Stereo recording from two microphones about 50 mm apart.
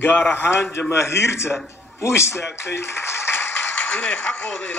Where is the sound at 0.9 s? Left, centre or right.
Left.